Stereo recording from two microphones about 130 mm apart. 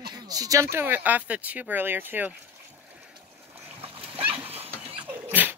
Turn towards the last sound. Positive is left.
turn(degrees=-15)  # may be behind; listen again after turning